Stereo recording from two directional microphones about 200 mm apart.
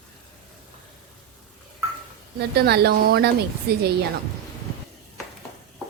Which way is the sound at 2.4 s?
55° right (ahead or behind).